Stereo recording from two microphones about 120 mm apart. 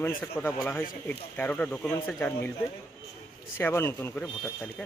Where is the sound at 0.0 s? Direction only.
15° left (ahead or behind).